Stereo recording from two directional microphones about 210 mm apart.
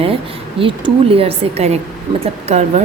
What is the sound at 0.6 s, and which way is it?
Speech, 25° right (ahead or behind).